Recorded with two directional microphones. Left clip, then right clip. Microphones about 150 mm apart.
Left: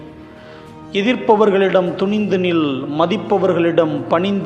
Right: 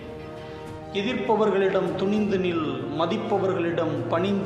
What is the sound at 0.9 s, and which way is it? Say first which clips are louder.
A man's voice: left 10 dB; 50° left (ahead or behind).